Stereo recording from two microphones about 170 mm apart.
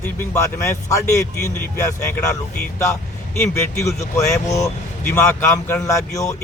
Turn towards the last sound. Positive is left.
turn(degrees=20)  # may be behind; listen again after turning